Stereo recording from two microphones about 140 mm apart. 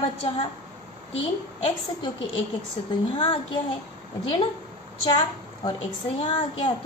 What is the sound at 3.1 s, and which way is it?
Speech, 35° left (ahead or behind).